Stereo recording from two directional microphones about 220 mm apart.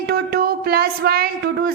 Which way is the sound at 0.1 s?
45° right (ahead or behind).